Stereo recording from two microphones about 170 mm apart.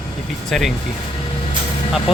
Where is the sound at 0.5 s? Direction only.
Centre (ahead or behind).